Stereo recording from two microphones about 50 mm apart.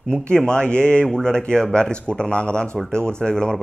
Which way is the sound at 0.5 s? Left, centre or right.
Centre.